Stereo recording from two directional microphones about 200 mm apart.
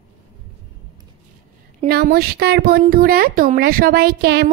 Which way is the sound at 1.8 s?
50° right (ahead or behind).